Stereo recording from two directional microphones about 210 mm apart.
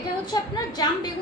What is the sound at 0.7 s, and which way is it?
Speech, 20° left (ahead or behind).